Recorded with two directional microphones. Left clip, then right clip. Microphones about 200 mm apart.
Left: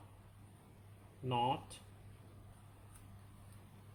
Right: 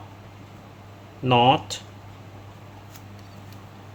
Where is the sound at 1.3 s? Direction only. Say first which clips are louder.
Right 18 dB; 30° right (ahead or behind).